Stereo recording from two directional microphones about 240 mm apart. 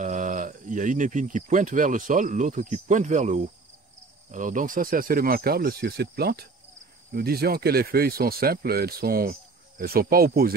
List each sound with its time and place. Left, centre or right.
0.0 s speech: right